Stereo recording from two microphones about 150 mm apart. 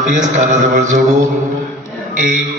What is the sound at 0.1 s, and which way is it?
Mantra, 55° right (ahead or behind).